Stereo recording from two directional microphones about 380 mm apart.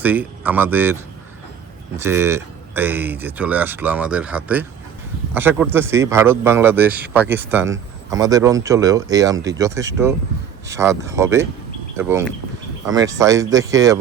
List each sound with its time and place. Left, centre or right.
0.0 s speech: centre
2.0 s speech: centre